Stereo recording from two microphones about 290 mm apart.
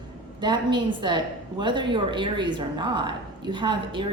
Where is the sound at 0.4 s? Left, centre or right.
Centre.